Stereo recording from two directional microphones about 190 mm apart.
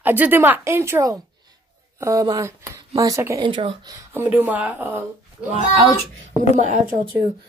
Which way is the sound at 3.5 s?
25° right (ahead or behind).